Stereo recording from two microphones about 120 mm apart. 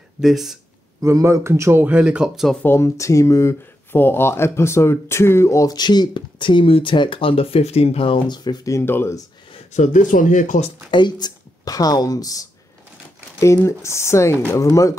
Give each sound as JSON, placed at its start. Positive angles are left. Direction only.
{"t": 0.2, "sound": "speech", "side_deg": -5}
{"t": 1.0, "sound": "speech", "side_deg": -25}
{"t": 2.6, "sound": "speech", "side_deg": 20}
{"t": 9.7, "sound": "speech", "side_deg": 90}
{"t": 10.9, "sound": "speech", "side_deg": 40}